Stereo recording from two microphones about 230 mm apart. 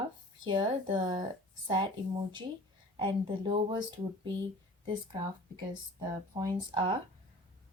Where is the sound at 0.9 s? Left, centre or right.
Centre.